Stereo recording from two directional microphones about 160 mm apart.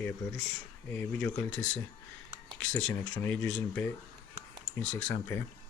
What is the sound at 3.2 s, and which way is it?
Speech, 10° left (ahead or behind).